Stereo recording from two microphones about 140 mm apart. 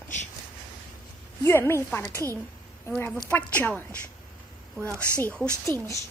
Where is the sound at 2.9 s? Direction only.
5° left (ahead or behind).